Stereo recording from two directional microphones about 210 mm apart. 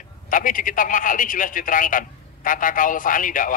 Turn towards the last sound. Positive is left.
turn(degrees=40)  # may be behind; listen again after turning